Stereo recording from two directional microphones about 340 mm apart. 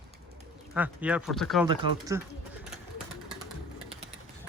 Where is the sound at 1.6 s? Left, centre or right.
Centre.